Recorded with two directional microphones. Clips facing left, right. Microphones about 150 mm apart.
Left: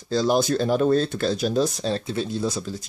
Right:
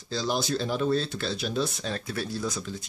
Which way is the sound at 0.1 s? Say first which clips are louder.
Left 8 dB; 50° left (ahead or behind).